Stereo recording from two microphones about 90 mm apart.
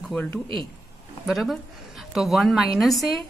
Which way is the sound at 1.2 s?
Centre (ahead or behind).